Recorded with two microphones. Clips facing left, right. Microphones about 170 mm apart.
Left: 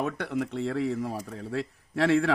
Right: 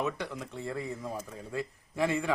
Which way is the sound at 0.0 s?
65° left (ahead or behind).